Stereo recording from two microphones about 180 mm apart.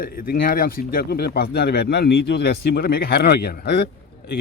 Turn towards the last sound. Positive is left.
turn(degrees=65)  # may be behind; listen again after turning